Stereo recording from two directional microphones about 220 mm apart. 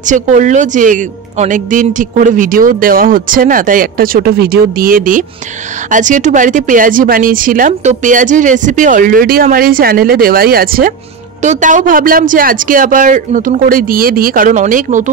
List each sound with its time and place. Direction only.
0.0 s a woman's voice: 35° right (ahead or behind)